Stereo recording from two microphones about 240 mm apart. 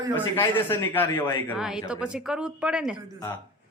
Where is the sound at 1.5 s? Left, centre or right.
Centre.